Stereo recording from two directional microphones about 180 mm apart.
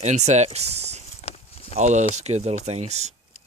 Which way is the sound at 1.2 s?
35° left (ahead or behind).